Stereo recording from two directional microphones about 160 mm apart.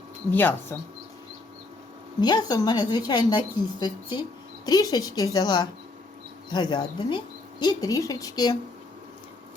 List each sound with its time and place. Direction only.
0.3 s speech: 10° left (ahead or behind)
2.2 s speech: 25° left (ahead or behind)